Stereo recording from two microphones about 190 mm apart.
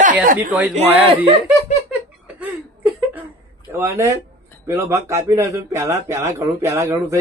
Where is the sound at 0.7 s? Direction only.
35° right (ahead or behind).